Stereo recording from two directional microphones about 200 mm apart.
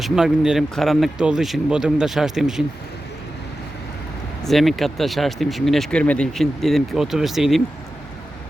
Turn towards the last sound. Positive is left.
turn(degrees=0)  # may be behind; listen again after turning